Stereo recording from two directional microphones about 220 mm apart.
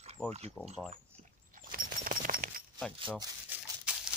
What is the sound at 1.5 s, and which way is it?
Horse, 40° right (ahead or behind).